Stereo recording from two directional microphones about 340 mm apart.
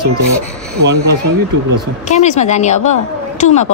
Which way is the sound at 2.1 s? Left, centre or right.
Centre.